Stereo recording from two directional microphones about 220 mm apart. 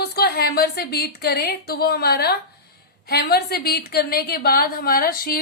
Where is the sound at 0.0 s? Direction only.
45° left (ahead or behind).